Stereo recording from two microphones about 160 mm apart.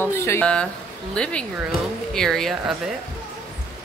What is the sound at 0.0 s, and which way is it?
Speech, 15° left (ahead or behind).